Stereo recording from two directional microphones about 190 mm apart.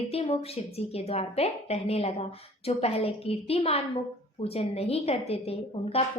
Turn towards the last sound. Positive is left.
turn(degrees=30)  # may be behind; listen again after turning